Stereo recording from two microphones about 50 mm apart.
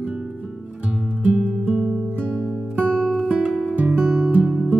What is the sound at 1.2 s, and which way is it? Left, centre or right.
Music, right.